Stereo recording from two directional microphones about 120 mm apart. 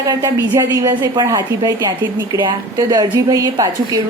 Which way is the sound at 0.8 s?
35° right (ahead or behind).